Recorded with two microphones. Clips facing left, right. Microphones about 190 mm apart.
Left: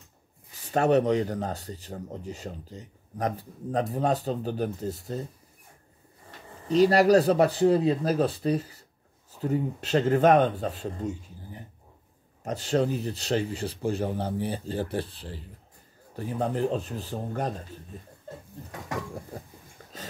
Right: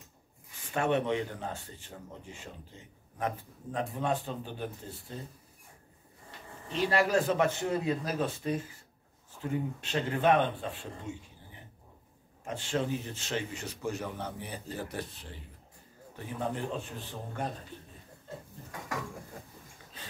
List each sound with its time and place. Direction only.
0.5 s speech: 40° left (ahead or behind)
6.7 s speech: 40° left (ahead or behind)
19.8 s sniff: 45° left (ahead or behind)